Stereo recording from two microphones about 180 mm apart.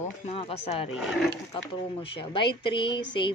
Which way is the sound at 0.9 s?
Centre (ahead or behind).